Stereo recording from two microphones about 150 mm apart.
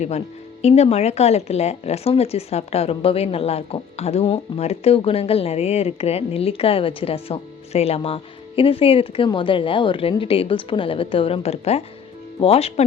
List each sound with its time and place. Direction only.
0.6 s speech: 45° left (ahead or behind)